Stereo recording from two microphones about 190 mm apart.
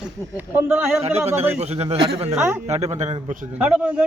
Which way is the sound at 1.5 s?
35° right (ahead or behind).